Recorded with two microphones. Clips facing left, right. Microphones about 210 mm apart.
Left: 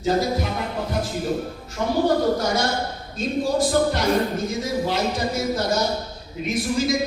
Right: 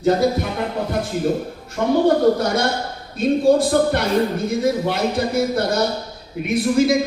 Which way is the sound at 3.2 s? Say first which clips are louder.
Right 7 dB; 60° right (ahead or behind).